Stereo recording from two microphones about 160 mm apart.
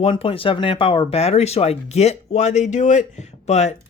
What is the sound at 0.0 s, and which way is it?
Speech, 35° left (ahead or behind).